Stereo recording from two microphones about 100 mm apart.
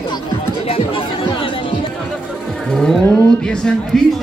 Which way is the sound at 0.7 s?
65° left (ahead or behind).